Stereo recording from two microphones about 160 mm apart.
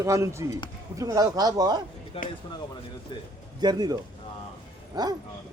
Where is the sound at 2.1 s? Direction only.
35° left (ahead or behind).